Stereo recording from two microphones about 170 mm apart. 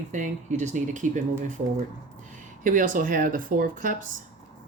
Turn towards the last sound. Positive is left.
turn(degrees=-55)  # may be behind; listen again after turning